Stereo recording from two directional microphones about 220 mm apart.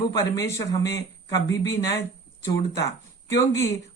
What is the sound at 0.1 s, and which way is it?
Speech, 15° left (ahead or behind).